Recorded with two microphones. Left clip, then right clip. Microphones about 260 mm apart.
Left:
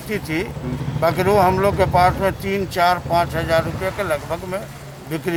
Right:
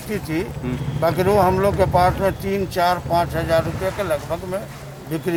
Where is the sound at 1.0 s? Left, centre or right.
Centre.